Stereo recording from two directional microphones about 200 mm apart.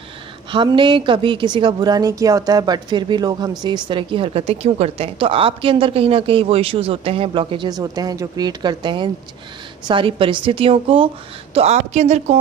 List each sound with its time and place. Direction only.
0.5 s a woman's voice: 25° right (ahead or behind)